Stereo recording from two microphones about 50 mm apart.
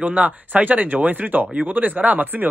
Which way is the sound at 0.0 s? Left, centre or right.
Right.